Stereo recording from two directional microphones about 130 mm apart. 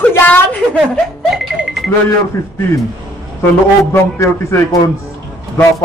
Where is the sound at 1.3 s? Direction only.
Centre (ahead or behind).